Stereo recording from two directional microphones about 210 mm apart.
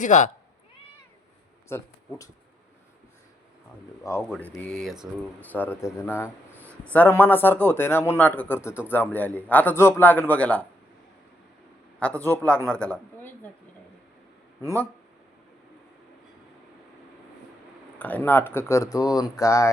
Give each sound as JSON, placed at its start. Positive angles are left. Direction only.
{"t": 0.0, "sound": "speech", "side_deg": 35}
{"t": 1.7, "sound": "speech", "side_deg": 15}
{"t": 4.2, "sound": "speech", "side_deg": 5}
{"t": 11.9, "sound": "a woman's voice", "side_deg": 5}
{"t": 14.6, "sound": "speech", "side_deg": 10}
{"t": 17.9, "sound": "speech", "side_deg": 10}